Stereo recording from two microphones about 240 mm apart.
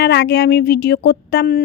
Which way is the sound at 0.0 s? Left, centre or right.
Left.